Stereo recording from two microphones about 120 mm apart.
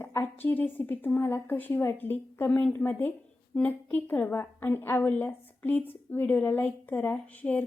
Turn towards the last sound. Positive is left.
turn(degrees=10)  # may be behind; listen again after turning